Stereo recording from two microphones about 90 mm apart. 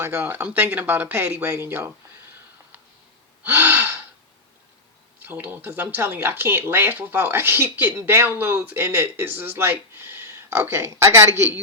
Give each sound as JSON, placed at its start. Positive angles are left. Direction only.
{"t": 0.0, "sound": "speech", "side_deg": -30}
{"t": 3.4, "sound": "gasp", "side_deg": -15}
{"t": 5.2, "sound": "speech", "side_deg": -20}